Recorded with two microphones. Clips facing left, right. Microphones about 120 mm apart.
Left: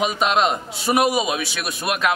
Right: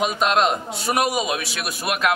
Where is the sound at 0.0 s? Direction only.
Centre (ahead or behind).